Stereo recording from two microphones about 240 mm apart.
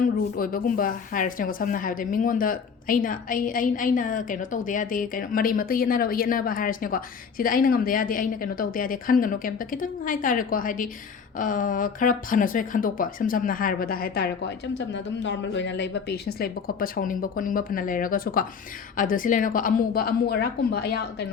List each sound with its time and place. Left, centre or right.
0.0 s speech: left